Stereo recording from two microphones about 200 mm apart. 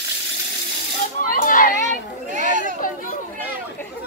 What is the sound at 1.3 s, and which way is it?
Children playing, 45° left (ahead or behind).